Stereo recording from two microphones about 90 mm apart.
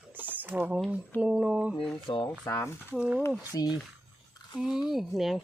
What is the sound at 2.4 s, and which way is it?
Speech, 30° left (ahead or behind).